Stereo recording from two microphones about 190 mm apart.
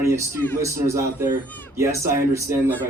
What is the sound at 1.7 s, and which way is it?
Speech, 15° right (ahead or behind).